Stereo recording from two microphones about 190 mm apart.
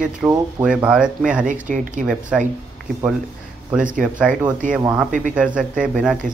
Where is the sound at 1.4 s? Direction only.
45° right (ahead or behind).